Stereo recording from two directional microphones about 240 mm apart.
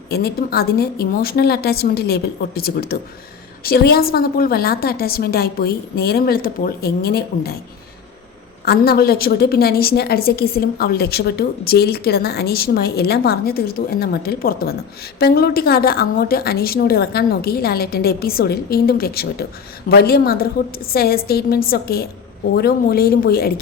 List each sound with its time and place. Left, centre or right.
0.1 s a woman's voice: left
8.6 s a woman's voice: left